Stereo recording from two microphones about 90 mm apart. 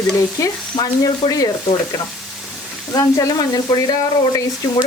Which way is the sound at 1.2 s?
60° left (ahead or behind).